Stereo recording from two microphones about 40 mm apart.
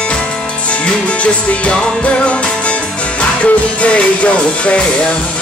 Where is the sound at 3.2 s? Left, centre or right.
Left.